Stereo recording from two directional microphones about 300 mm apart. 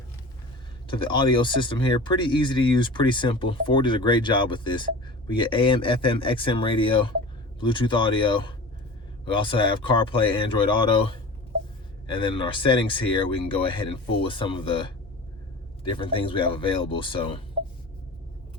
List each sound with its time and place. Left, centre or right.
0.9 s speech: centre
15.8 s speech: centre